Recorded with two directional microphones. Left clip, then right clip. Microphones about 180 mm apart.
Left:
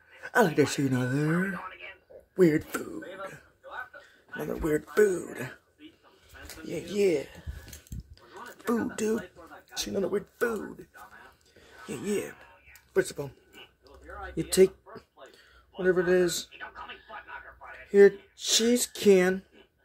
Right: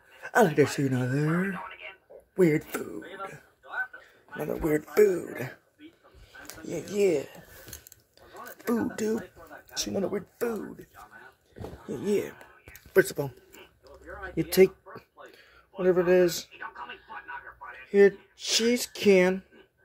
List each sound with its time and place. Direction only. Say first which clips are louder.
0.2 s speech: right 2 dB; centre (ahead or behind)
4.5 s speech: right 1 dB; centre (ahead or behind)
6.6 s speech: right 1 dB; centre (ahead or behind)
8.3 s a sound: even; centre (ahead or behind)
8.9 s speech: even; 5° left (ahead or behind)
12.0 s speech: right 4 dB; 10° left (ahead or behind)
12.9 s speech: right 5 dB; 25° right (ahead or behind)
13.8 s a sound: right 2 dB; centre (ahead or behind)
17.8 s speech: left 1 dB; 10° left (ahead or behind)